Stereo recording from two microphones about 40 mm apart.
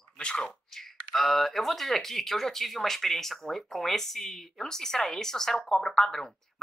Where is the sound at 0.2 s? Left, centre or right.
Left.